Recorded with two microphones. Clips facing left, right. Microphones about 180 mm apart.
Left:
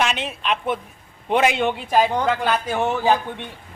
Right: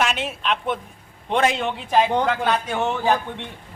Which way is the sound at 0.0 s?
5° right (ahead or behind).